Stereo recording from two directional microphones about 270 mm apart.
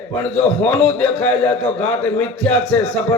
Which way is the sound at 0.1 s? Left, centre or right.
Centre.